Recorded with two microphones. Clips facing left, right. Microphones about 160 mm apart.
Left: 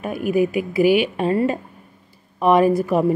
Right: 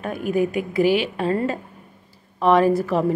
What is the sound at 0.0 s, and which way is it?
A woman's voice, 10° left (ahead or behind).